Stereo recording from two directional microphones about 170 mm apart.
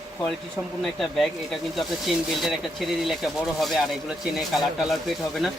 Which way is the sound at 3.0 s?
Centre (ahead or behind).